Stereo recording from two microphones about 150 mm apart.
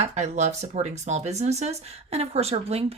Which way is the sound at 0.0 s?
50° right (ahead or behind).